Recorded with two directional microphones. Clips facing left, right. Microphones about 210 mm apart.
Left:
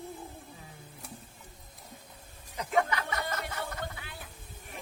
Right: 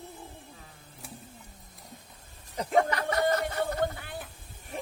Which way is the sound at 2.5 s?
35° right (ahead or behind).